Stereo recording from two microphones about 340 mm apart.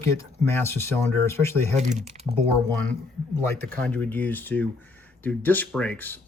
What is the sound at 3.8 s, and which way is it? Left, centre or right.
Speech, centre.